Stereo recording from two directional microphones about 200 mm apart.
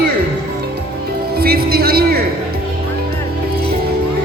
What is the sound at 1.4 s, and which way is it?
Music, 50° right (ahead or behind).